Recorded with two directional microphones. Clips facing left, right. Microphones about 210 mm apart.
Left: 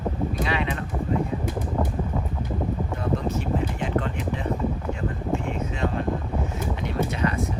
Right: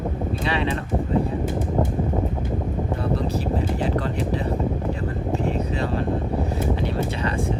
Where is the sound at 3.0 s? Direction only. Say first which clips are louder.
Even; 35° right (ahead or behind).